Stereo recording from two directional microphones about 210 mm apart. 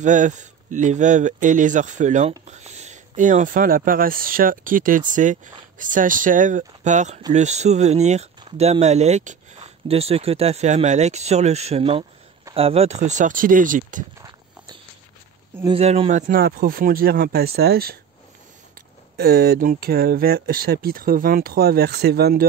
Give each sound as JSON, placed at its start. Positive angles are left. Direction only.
{"t": 0.0, "sound": "speech", "side_deg": -35}
{"t": 15.7, "sound": "speech", "side_deg": -30}